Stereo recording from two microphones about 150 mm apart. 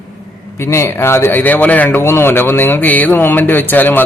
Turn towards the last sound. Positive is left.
turn(degrees=10)  # may be behind; listen again after turning